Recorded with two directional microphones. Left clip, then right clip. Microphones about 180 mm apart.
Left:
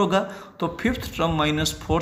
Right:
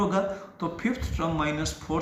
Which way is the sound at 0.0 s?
50° left (ahead or behind).